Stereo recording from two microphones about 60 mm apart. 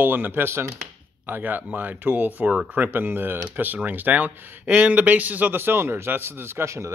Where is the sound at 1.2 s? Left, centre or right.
Right.